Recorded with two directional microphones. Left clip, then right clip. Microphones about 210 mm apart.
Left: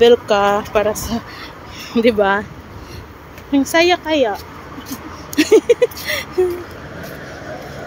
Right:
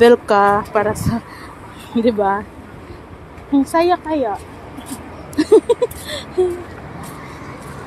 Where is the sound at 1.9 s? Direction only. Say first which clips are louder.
Left 2 dB; 5° left (ahead or behind).